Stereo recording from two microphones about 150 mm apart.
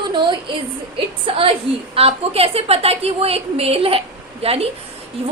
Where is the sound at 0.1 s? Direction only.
30° right (ahead or behind).